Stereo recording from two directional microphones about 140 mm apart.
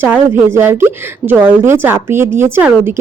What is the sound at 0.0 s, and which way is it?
Speech, 15° right (ahead or behind).